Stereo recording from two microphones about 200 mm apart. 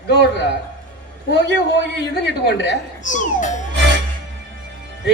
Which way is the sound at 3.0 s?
40° left (ahead or behind).